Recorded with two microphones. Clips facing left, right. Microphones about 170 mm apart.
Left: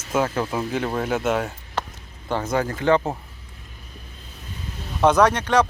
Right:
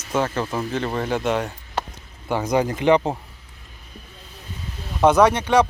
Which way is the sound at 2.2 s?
10° right (ahead or behind).